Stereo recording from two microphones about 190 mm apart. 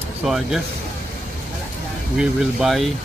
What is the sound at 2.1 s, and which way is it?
Speech, centre (ahead or behind).